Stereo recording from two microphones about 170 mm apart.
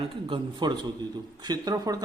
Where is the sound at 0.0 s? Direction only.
30° right (ahead or behind).